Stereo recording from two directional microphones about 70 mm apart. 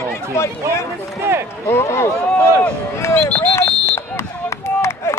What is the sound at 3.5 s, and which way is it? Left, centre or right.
Alarm, left.